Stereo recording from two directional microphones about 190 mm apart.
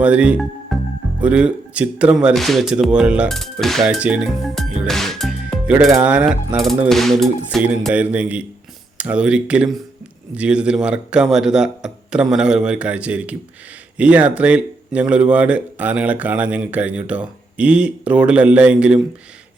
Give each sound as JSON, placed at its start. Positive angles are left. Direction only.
{"t": 0.0, "sound": "speech", "side_deg": -5}